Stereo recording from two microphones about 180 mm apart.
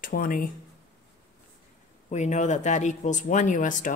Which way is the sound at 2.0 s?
40° left (ahead or behind).